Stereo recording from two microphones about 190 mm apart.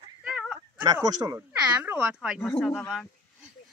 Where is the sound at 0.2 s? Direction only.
Centre (ahead or behind).